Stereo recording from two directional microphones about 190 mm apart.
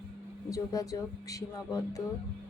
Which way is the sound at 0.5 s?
20° left (ahead or behind).